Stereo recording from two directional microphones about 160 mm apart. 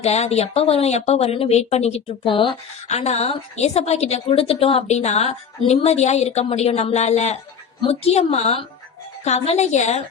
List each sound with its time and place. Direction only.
0.0 s a woman's voice: 40° left (ahead or behind)
2.9 s a woman's voice: 40° left (ahead or behind)